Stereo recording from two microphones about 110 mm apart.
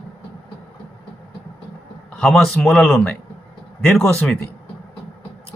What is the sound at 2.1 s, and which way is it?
Speech, centre (ahead or behind).